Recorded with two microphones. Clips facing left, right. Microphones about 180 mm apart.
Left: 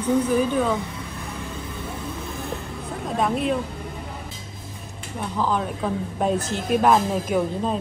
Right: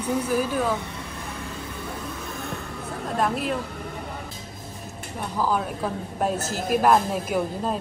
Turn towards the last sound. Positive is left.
turn(degrees=-5)  # may be behind; listen again after turning